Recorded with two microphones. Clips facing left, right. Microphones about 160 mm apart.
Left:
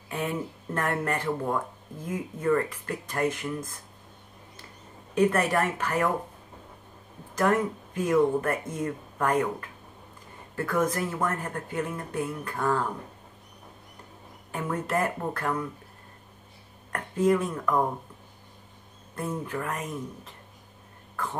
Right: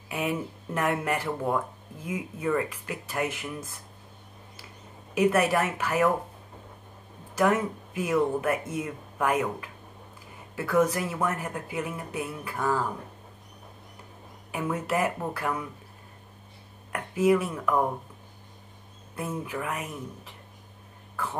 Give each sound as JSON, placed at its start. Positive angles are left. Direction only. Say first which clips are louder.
{"t": 0.1, "sound": "speech", "louder": "right 1 dB", "side_deg": -10}
{"t": 5.1, "sound": "speech", "louder": "right 1 dB", "side_deg": -10}
{"t": 7.3, "sound": "speech", "louder": "even", "side_deg": -10}
{"t": 14.5, "sound": "speech", "louder": "even", "side_deg": -10}
{"t": 16.9, "sound": "speech", "louder": "right 1 dB", "side_deg": -10}
{"t": 19.1, "sound": "speech", "louder": "left 1 dB", "side_deg": -10}